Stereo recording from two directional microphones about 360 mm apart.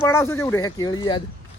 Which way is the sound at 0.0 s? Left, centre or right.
Centre.